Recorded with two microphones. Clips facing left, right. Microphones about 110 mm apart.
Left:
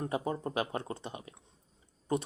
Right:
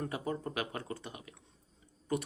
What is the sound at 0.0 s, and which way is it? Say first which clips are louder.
Speech: left 3 dB; 25° left (ahead or behind).